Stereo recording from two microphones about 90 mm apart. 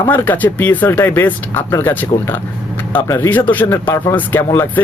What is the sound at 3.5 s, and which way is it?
Speech, 20° left (ahead or behind).